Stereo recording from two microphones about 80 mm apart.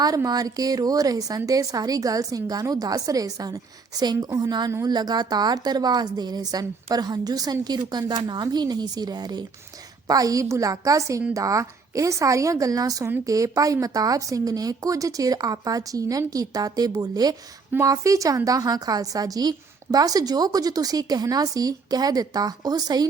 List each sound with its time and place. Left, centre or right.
0.3 s a woman's voice: right
17.8 s a woman's voice: right